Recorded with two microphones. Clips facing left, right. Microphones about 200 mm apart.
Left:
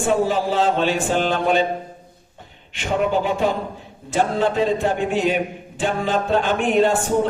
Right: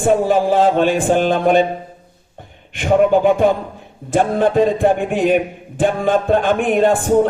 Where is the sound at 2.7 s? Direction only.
55° right (ahead or behind).